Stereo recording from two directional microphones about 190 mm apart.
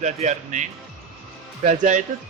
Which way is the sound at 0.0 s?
40° right (ahead or behind).